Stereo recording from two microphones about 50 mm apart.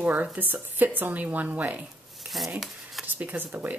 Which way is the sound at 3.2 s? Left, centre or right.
Right.